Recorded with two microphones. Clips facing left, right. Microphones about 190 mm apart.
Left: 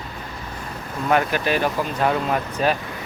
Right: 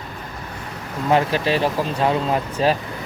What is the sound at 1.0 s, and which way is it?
Speech, 25° right (ahead or behind).